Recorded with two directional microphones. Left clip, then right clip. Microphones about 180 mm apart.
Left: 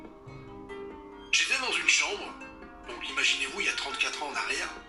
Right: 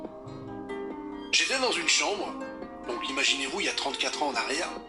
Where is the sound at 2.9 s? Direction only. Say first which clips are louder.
Right 1 dB; 30° right (ahead or behind).